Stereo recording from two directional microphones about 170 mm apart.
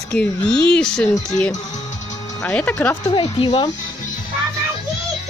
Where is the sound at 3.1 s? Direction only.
35° left (ahead or behind).